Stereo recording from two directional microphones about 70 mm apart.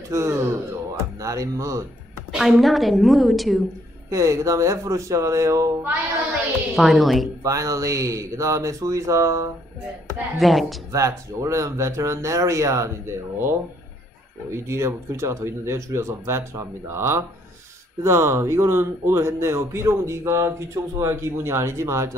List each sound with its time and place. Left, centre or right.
0.1 s speech: right
2.3 s a woman's voice: centre
4.1 s speech: right
6.7 s a woman's voice: centre
7.4 s speech: right
10.3 s a woman's voice: centre
10.9 s speech: right